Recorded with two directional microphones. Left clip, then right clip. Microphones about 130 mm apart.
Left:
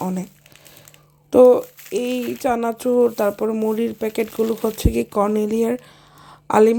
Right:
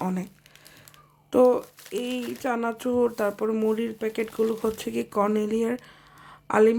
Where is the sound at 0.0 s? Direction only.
15° left (ahead or behind).